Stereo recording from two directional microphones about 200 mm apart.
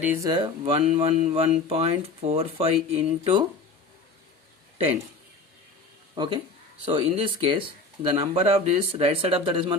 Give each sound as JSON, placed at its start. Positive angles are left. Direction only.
{"t": 0.0, "sound": "speech", "side_deg": -10}
{"t": 0.3, "sound": "speech", "side_deg": -25}
{"t": 6.1, "sound": "speech", "side_deg": -25}